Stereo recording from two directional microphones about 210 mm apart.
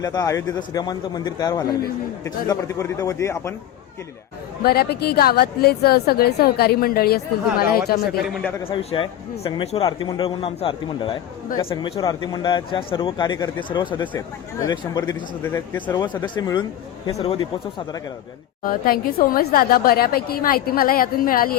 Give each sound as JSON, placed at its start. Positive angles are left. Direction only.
{"t": 0.0, "sound": "a man's voice", "side_deg": 20}
{"t": 4.6, "sound": "a woman's voice", "side_deg": 50}
{"t": 8.2, "sound": "a man's voice", "side_deg": 0}
{"t": 8.6, "sound": "a man's voice", "side_deg": 25}
{"t": 15.9, "sound": "a man's voice", "side_deg": 20}
{"t": 18.6, "sound": "a woman's voice", "side_deg": 40}